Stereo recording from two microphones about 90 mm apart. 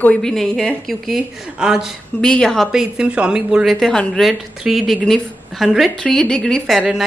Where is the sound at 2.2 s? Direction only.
10° left (ahead or behind).